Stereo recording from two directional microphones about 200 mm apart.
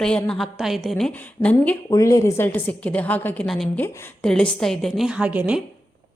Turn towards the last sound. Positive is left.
turn(degrees=-5)  # may be behind; listen again after turning